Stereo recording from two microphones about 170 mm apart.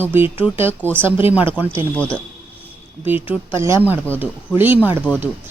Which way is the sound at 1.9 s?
10° left (ahead or behind).